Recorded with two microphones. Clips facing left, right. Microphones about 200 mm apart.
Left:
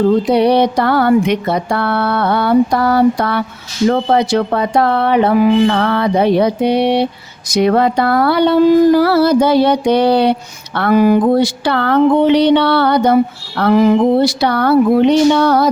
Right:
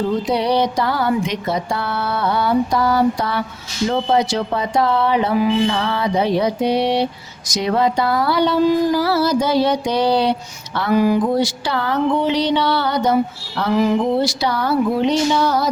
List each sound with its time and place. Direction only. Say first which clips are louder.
0.3 s speech: left 6 dB; 60° left (ahead or behind)